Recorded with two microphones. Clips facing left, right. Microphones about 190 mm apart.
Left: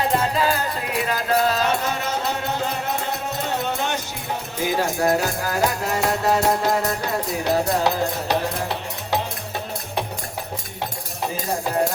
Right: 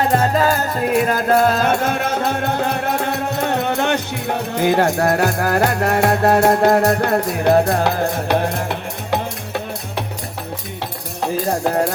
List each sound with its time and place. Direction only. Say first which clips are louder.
0.1 s music: right 5 dB; 50° right (ahead or behind)